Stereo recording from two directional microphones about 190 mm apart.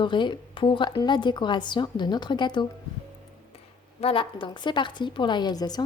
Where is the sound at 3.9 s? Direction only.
30° left (ahead or behind).